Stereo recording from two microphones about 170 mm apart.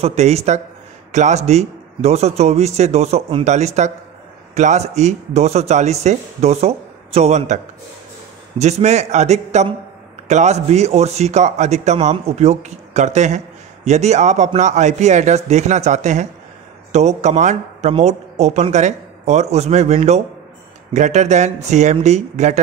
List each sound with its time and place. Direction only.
0.0 s a man's voice: 40° right (ahead or behind)